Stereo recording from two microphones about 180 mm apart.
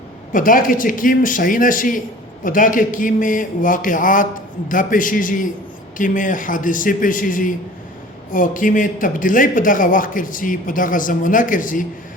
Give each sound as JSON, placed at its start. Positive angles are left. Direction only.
{"t": 0.3, "sound": "a man's voice", "side_deg": 50}